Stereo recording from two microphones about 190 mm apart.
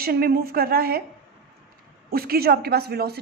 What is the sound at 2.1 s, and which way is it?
Speech, 55° right (ahead or behind).